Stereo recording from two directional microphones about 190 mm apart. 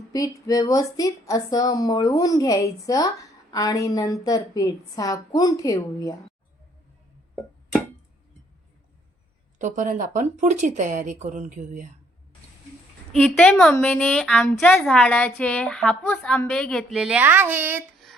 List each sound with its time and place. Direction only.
0.1 s a woman's voice: 20° left (ahead or behind)
9.6 s speech: 40° right (ahead or behind)
13.1 s a woman's voice: 5° left (ahead or behind); by 17.8 s 10° right (ahead or behind)